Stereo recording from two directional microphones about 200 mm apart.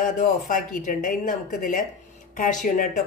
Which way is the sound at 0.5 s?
40° left (ahead or behind).